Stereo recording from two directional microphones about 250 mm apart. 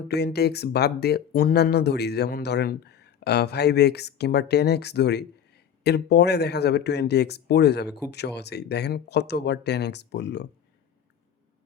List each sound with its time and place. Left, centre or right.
0.1 s speech: left